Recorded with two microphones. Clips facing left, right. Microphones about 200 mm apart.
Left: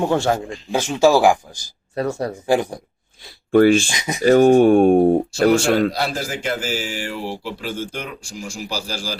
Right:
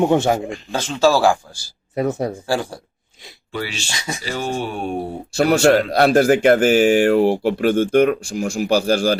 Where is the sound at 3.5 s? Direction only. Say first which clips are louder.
Left 15 dB; 50° left (ahead or behind).